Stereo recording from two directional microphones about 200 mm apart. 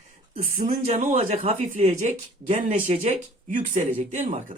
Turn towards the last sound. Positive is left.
turn(degrees=-40)  # may be behind; listen again after turning